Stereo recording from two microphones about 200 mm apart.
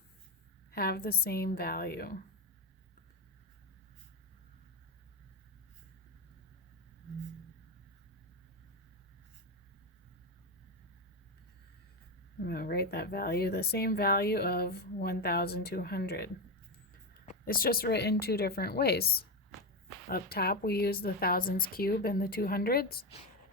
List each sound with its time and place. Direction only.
0.7 s a woman's voice: 50° left (ahead or behind)
12.5 s a woman's voice: 50° left (ahead or behind)
17.4 s a woman's voice: 45° left (ahead or behind)